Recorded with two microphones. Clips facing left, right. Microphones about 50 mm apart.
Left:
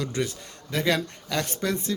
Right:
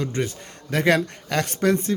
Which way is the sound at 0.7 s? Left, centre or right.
Right.